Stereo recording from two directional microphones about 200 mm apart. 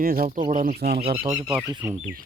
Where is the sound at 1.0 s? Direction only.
25° right (ahead or behind).